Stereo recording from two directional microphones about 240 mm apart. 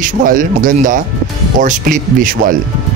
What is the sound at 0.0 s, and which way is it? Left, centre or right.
A man's voice, right.